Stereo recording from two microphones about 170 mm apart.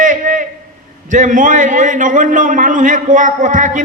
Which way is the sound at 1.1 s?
50° right (ahead or behind).